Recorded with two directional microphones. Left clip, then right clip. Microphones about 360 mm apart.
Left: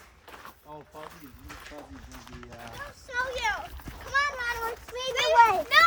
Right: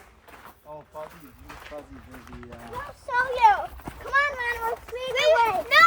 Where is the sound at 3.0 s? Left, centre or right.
Centre.